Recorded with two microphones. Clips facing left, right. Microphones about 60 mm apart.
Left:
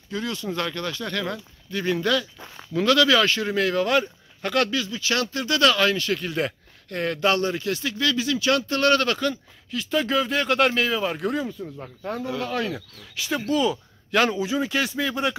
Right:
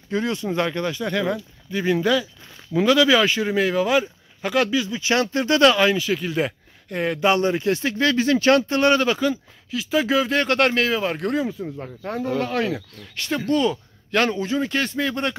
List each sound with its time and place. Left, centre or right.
0.1 s speech: right; by 4.8 s centre
4.8 s speech: right; by 11.4 s centre
11.4 s speech: centre
12.7 s speech: centre